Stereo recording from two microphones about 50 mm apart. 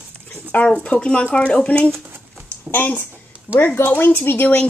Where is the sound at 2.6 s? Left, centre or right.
Left.